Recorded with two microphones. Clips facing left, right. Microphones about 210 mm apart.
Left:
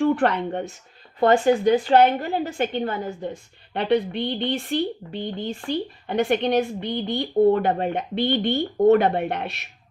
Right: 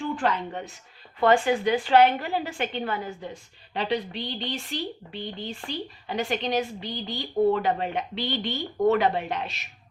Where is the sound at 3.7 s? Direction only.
55° left (ahead or behind).